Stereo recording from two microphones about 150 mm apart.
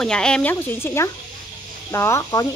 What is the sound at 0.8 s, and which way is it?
Speech, 20° left (ahead or behind).